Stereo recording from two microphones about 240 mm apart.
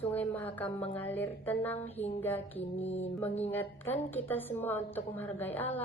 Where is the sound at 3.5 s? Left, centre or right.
Centre.